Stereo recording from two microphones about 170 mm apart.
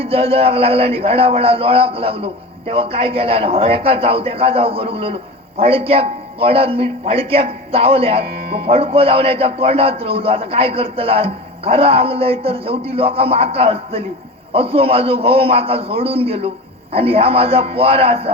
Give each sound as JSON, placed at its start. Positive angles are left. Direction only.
{"t": 0.0, "sound": "a man's voice", "side_deg": -35}